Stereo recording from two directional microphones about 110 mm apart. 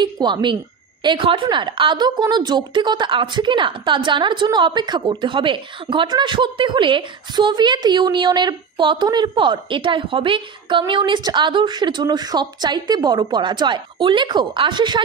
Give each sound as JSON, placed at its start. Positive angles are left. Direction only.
{"t": 0.0, "sound": "a woman's voice", "side_deg": -45}